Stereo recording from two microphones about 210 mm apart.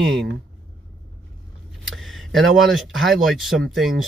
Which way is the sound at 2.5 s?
Centre (ahead or behind).